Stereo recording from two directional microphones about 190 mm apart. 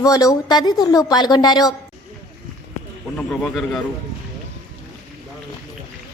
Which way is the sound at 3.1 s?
Centre (ahead or behind).